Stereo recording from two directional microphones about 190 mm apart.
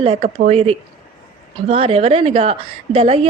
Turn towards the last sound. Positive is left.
turn(degrees=-30)  # may be behind; listen again after turning